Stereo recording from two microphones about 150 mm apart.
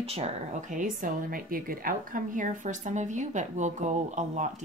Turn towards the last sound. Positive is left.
turn(degrees=-50)  # may be behind; listen again after turning